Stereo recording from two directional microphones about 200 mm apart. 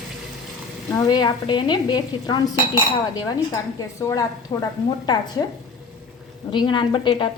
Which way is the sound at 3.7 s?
15° left (ahead or behind).